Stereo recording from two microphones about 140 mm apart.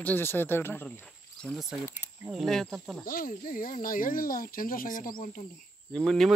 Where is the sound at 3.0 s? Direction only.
90° left.